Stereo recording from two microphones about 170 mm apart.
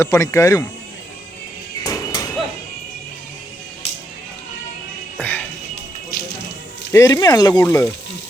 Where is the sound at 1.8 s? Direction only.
25° left (ahead or behind).